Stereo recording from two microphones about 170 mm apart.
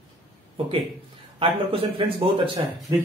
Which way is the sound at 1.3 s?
35° right (ahead or behind).